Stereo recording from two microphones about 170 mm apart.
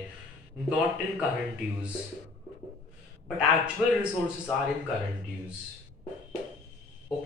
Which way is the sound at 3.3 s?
5° right (ahead or behind).